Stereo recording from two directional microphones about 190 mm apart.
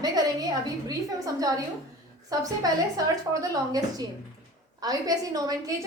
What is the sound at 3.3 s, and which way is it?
A woman's voice, 20° right (ahead or behind).